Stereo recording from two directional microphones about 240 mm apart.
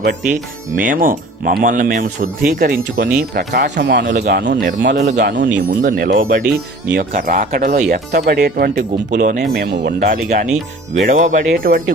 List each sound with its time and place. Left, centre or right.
0.8 s speech: right